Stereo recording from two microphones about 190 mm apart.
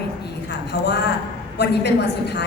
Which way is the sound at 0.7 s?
60° left (ahead or behind).